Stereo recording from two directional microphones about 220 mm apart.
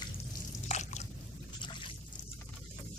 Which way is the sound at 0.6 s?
30° left (ahead or behind).